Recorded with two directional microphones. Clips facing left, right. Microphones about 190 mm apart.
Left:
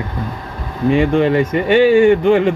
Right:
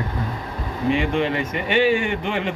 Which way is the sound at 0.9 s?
45° left (ahead or behind).